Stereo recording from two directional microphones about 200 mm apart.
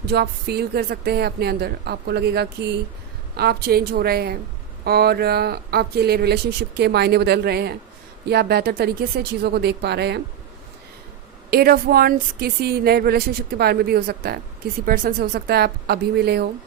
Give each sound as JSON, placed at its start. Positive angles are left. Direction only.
{"t": 0.1, "sound": "speech", "side_deg": -50}
{"t": 11.5, "sound": "speech", "side_deg": -50}